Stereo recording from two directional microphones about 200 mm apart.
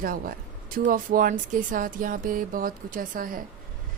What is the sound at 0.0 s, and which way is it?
A woman's voice, 45° right (ahead or behind).